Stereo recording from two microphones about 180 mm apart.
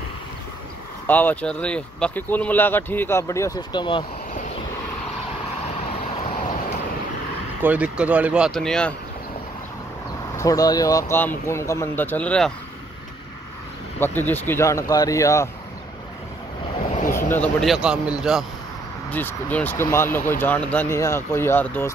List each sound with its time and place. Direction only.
1.0 s speech: 10° left (ahead or behind); by 4.0 s 25° left (ahead or behind)
5.9 s vehicle: 35° left (ahead or behind)
7.6 s speech: 10° right (ahead or behind)
10.3 s speech: 20° left (ahead or behind)
13.9 s speech: 10° left (ahead or behind)
17.3 s speech: 5° left (ahead or behind)
19.0 s speech: 10° left (ahead or behind)